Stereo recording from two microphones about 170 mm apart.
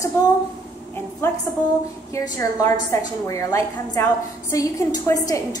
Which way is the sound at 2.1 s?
20° left (ahead or behind).